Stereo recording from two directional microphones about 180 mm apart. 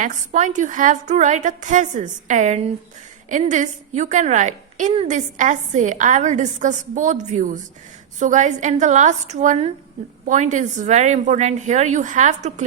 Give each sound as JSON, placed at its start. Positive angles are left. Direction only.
{"t": 0.0, "sound": "a woman's voice", "side_deg": -45}